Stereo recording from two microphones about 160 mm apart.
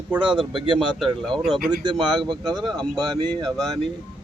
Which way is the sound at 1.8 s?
30° right (ahead or behind).